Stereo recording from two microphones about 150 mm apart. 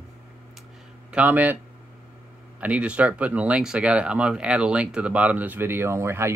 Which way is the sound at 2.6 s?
10° right (ahead or behind).